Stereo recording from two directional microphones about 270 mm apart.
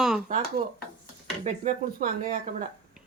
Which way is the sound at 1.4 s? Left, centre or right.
Right.